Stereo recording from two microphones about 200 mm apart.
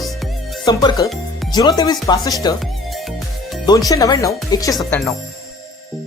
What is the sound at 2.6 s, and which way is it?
Music, centre (ahead or behind).